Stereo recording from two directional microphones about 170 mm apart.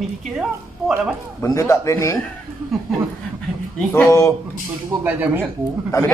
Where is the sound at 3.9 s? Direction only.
15° left (ahead or behind).